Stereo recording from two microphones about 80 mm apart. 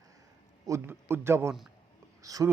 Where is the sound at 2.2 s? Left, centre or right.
Right.